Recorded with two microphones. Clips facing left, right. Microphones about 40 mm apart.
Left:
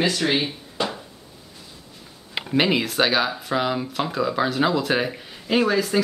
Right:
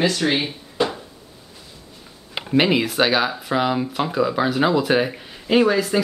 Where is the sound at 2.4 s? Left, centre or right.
Centre.